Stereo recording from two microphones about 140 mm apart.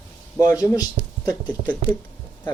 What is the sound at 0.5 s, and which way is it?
A man's voice, 25° left (ahead or behind).